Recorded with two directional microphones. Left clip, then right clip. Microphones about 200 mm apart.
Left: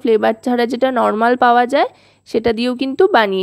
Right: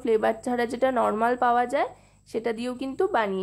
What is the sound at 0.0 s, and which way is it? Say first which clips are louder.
A woman's voice: left 9 dB; 35° left (ahead or behind).